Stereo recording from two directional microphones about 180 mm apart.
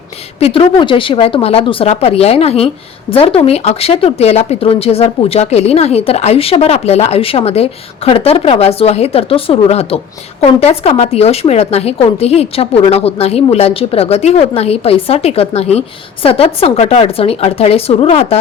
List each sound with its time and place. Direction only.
0.3 s speech: 30° left (ahead or behind)